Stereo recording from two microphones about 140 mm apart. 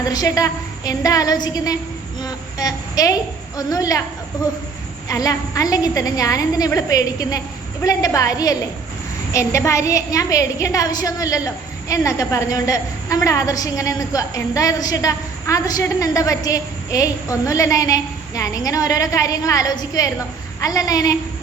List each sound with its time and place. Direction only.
0.0 s a woman's voice: 25° left (ahead or behind)
2.2 s a sound: 25° left (ahead or behind)
3.6 s a woman's voice: 25° left (ahead or behind)
5.0 s a woman's voice: 25° left (ahead or behind)